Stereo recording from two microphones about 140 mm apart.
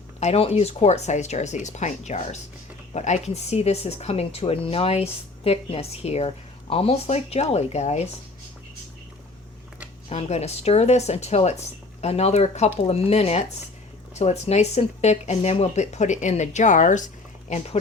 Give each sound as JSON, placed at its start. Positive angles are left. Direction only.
{"t": 0.2, "sound": "speech", "side_deg": 50}
{"t": 10.1, "sound": "speech", "side_deg": 50}